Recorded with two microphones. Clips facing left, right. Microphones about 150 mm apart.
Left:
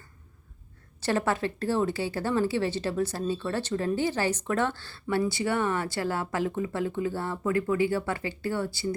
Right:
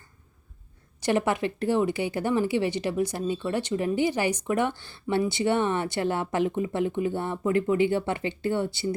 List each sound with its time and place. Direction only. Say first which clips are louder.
1.0 s a woman's voice: right 2 dB; 15° right (ahead or behind)